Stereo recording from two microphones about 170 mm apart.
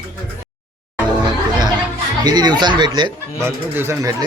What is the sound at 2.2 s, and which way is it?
Speech, 25° right (ahead or behind).